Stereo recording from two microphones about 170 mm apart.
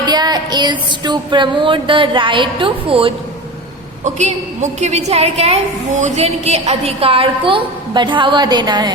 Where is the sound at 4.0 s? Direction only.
45° right (ahead or behind).